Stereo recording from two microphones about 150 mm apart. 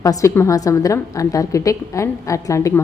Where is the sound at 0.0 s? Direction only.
25° left (ahead or behind).